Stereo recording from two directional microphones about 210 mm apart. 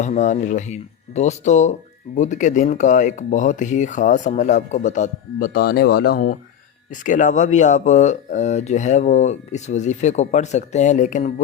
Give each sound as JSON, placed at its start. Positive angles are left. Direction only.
{"t": 0.0, "sound": "speech", "side_deg": 35}